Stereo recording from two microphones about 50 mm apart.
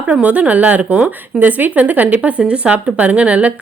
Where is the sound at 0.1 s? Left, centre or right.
Right.